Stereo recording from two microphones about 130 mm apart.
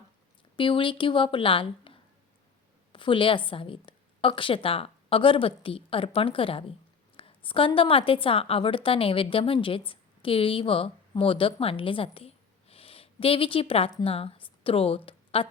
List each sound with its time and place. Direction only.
0.5 s a woman's voice: 40° left (ahead or behind)